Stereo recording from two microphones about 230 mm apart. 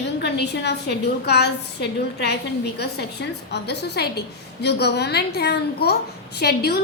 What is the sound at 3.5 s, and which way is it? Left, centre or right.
A woman's voice, left.